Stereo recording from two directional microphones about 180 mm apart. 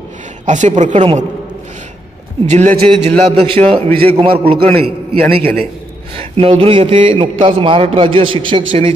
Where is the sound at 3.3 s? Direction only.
30° right (ahead or behind).